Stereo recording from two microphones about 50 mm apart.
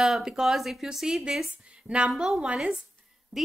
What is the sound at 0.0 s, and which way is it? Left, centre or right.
Speech, centre.